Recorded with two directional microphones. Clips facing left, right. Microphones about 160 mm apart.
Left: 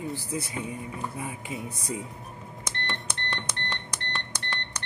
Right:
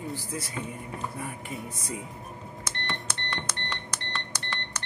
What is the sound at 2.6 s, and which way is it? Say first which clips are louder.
Cash register: left 1 dB; 5° right (ahead or behind).